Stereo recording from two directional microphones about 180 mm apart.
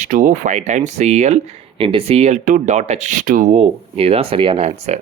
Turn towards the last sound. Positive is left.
turn(degrees=-30)  # may be behind; listen again after turning